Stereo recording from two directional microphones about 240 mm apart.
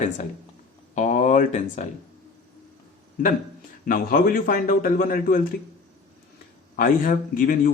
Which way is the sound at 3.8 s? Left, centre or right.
Left.